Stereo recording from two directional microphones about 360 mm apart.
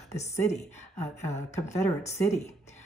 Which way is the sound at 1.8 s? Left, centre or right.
Centre.